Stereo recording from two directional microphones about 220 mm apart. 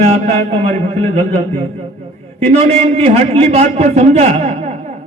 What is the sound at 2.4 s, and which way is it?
A man's voice, 30° right (ahead or behind).